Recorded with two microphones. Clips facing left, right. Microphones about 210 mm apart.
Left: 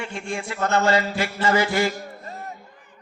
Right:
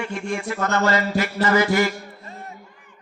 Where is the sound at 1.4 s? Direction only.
50° right (ahead or behind).